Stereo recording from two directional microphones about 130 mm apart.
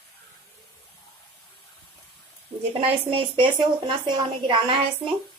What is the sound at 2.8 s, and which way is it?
Speech, 45° right (ahead or behind).